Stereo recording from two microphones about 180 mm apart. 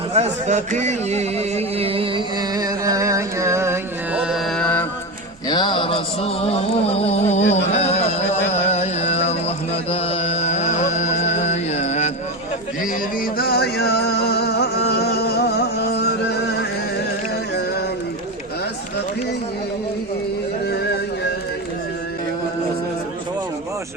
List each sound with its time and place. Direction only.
0.1 s speech: 40° right (ahead or behind)
2.6 s music: 20° right (ahead or behind); by 4.9 s 10° left (ahead or behind)
5.5 s mantra: 25° left (ahead or behind)
7.7 s music: 35° left (ahead or behind)
13.3 s music: 60° left (ahead or behind)